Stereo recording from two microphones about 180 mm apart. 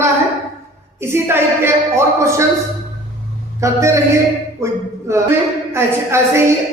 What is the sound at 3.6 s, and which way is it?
Speech, 15° right (ahead or behind).